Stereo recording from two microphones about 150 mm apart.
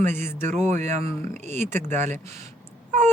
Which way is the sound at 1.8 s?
50° right (ahead or behind).